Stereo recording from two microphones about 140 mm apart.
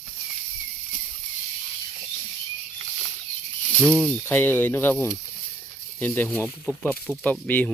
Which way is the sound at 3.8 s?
10° left (ahead or behind).